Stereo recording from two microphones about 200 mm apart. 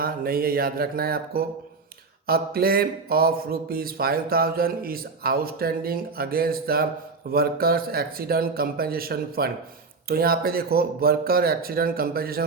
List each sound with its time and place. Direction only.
0.0 s speech: 50° right (ahead or behind)